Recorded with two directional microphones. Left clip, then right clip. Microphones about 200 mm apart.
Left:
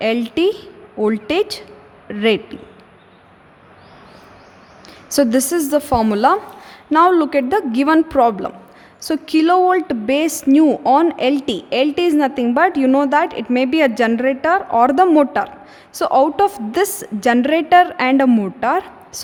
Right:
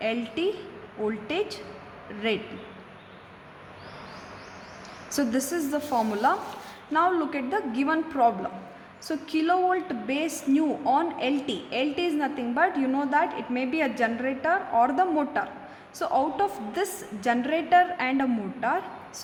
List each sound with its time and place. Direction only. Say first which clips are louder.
0.0 s a woman's voice: left 11 dB; 50° left (ahead or behind)
5.0 s a woman's voice: left 12 dB; 50° left (ahead or behind)